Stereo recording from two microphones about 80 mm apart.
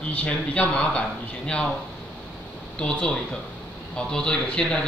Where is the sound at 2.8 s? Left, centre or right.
Centre.